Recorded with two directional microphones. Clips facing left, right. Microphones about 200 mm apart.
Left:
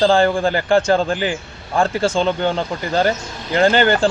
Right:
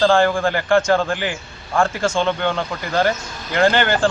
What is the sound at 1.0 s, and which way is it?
Speech, 20° left (ahead or behind).